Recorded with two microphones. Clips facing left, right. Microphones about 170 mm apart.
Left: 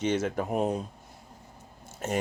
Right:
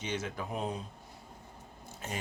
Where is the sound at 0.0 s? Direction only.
50° left (ahead or behind).